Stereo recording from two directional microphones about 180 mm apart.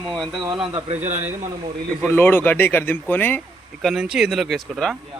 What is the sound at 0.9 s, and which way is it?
Speech, 40° right (ahead or behind).